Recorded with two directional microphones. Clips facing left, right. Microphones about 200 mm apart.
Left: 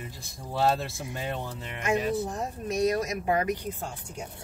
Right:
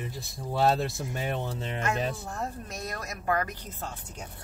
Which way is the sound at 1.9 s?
15° left (ahead or behind).